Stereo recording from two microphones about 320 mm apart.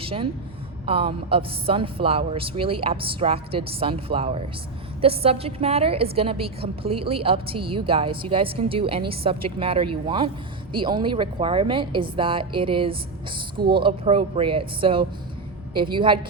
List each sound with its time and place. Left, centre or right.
0.0 s a woman's voice: centre